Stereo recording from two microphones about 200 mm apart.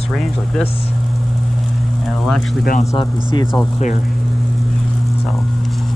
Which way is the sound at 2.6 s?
40° left (ahead or behind).